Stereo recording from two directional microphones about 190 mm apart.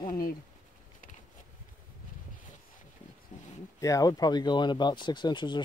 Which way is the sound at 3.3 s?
40° left (ahead or behind).